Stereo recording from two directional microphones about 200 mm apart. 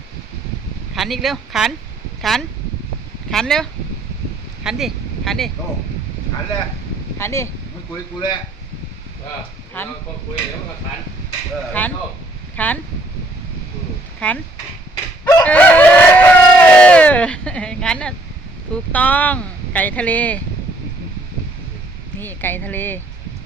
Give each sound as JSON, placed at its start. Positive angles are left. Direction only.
{"t": 0.9, "sound": "speech", "side_deg": 0}
{"t": 7.2, "sound": "speech", "side_deg": 15}
{"t": 9.7, "sound": "speech", "side_deg": 10}
{"t": 11.8, "sound": "speech", "side_deg": 10}
{"t": 14.2, "sound": "speech", "side_deg": 5}
{"t": 15.2, "sound": "chicken", "side_deg": 15}
{"t": 15.4, "sound": "a sound", "side_deg": 10}
{"t": 18.7, "sound": "speech", "side_deg": 5}
{"t": 22.2, "sound": "speech", "side_deg": 10}